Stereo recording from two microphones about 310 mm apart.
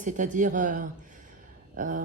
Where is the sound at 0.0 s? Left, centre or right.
Right.